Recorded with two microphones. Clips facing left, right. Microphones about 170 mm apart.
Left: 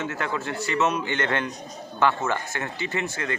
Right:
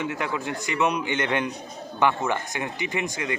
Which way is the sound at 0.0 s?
15° right (ahead or behind).